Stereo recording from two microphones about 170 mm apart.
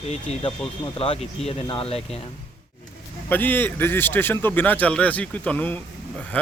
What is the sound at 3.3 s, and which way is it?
A man's voice, 10° left (ahead or behind).